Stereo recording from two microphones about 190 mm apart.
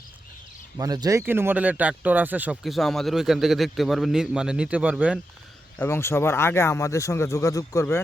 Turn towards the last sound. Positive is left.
turn(degrees=15)  # may be behind; listen again after turning